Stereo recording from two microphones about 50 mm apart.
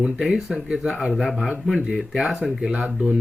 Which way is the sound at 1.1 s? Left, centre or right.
Centre.